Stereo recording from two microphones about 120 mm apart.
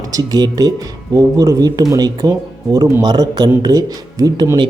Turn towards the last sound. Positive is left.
turn(degrees=-30)  # may be behind; listen again after turning